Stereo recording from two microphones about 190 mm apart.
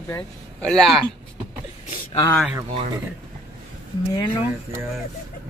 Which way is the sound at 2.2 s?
10° left (ahead or behind).